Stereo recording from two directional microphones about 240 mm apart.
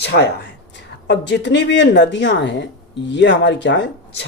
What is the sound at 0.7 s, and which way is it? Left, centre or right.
Speech, left.